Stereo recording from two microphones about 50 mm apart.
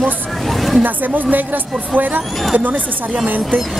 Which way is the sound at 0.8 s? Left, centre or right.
Right.